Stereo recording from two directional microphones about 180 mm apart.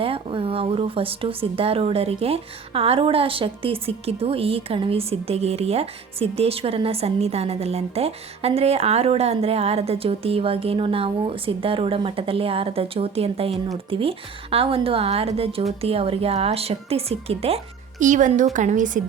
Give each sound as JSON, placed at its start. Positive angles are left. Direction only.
{"t": 0.0, "sound": "speech", "side_deg": -30}
{"t": 18.0, "sound": "a woman's voice", "side_deg": -45}